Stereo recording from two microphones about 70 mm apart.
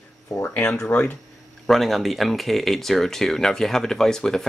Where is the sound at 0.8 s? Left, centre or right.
Left.